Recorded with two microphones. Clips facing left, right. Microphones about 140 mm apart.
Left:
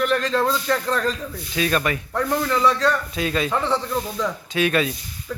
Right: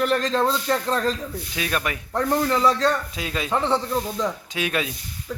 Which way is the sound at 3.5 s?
25° right (ahead or behind).